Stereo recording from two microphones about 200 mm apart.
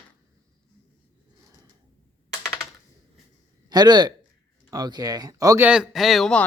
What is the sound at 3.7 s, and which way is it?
Speech, 20° right (ahead or behind).